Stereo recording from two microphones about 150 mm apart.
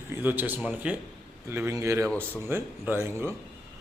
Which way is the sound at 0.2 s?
10° right (ahead or behind).